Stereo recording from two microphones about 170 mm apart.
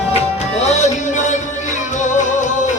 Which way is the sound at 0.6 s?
40° left (ahead or behind).